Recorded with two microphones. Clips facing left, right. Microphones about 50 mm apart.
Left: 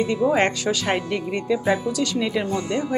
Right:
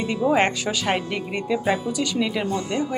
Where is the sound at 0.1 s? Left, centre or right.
Centre.